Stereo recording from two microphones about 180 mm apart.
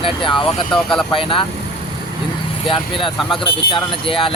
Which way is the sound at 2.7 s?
30° left (ahead or behind).